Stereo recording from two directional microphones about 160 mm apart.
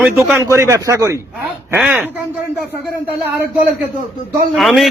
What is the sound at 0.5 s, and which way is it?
Speech, 15° right (ahead or behind).